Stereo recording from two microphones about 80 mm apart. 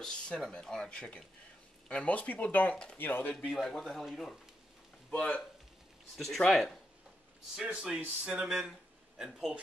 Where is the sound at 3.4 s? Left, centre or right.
Centre.